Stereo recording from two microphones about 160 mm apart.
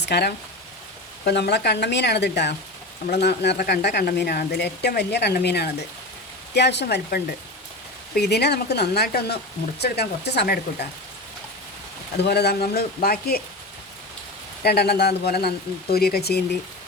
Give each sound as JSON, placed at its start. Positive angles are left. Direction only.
{"t": 0.0, "sound": "speech", "side_deg": 90}
{"t": 12.1, "sound": "speech", "side_deg": 90}
{"t": 14.6, "sound": "speech", "side_deg": 85}